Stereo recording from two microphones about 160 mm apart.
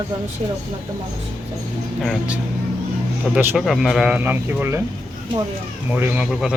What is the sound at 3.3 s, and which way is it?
Speech, 10° right (ahead or behind).